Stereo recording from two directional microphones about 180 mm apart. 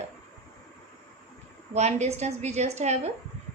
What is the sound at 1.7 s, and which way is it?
A woman's voice, 40° right (ahead or behind).